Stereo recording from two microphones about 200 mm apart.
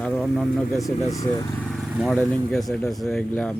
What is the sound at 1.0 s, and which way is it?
Speech, 15° left (ahead or behind).